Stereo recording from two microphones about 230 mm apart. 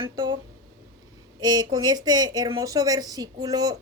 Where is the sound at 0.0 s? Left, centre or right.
Centre.